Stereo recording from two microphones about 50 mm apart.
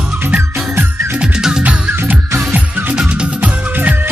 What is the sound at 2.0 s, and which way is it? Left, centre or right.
Music, right.